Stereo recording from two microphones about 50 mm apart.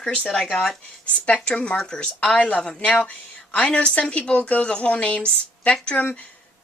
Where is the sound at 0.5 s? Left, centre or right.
Centre.